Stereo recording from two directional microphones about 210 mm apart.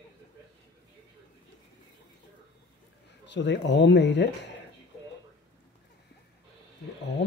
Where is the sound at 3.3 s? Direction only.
55° left (ahead or behind).